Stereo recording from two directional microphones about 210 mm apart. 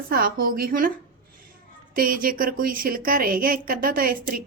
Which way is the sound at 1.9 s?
45° right (ahead or behind).